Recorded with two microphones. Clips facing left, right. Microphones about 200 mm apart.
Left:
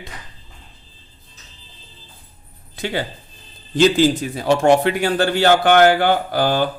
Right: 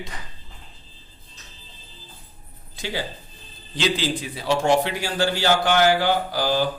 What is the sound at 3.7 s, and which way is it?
Speech, 45° left (ahead or behind).